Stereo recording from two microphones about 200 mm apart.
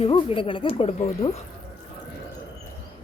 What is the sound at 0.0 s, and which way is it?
Speech, 30° left (ahead or behind).